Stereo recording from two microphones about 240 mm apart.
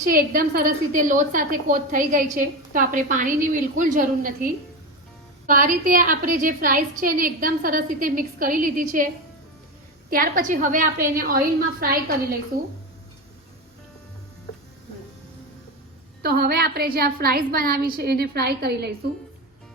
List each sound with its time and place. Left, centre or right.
0.0 s a woman's voice: right
10.1 s a woman's voice: right
16.2 s a woman's voice: right